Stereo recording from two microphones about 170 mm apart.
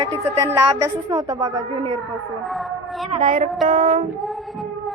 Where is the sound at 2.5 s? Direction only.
Centre (ahead or behind).